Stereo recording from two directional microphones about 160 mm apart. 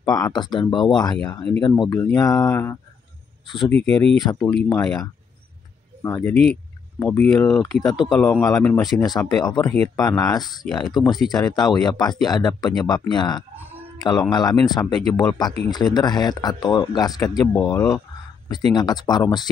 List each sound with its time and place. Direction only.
0.0 s speech: 25° left (ahead or behind)
1.1 s speech: 5° left (ahead or behind)
1.6 s speech: 30° left (ahead or behind)
2.0 s speech: 20° left (ahead or behind)
3.4 s speech: 30° left (ahead or behind)
3.9 s speech: 5° left (ahead or behind)
6.0 s speech: 20° left (ahead or behind)
6.3 s speech: 5° left (ahead or behind)
9.0 s speech: 25° left (ahead or behind)